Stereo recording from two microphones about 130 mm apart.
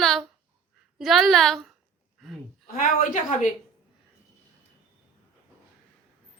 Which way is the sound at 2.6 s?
85° left.